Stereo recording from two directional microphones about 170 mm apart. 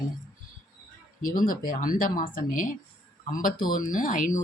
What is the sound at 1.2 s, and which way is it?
Speech, 55° left (ahead or behind).